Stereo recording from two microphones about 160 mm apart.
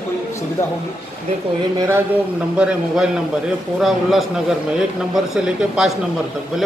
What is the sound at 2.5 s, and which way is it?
A man's voice, 5° right (ahead or behind).